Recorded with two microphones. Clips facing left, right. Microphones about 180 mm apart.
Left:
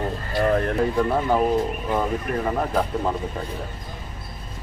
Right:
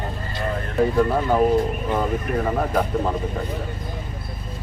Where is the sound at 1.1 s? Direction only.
Centre (ahead or behind).